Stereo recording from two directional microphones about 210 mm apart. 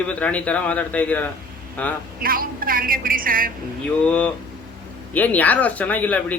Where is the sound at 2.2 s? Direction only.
45° right (ahead or behind).